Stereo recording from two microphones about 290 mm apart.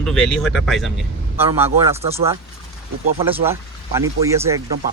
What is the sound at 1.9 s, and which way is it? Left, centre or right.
Speech, right.